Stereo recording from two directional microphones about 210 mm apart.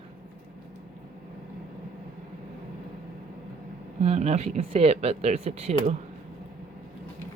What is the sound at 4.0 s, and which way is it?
Speech, 30° right (ahead or behind).